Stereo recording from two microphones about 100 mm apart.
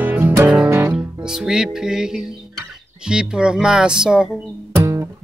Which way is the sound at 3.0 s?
10° right (ahead or behind).